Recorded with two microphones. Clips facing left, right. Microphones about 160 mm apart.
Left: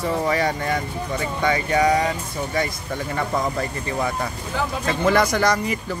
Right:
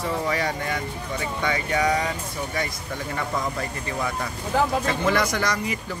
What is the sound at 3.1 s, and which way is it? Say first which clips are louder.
Speech: left 4 dB; 35° left (ahead or behind).